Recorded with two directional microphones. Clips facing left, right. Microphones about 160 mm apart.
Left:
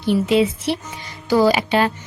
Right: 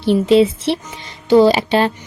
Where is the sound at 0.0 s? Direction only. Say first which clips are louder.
Right 5 dB; 30° right (ahead or behind).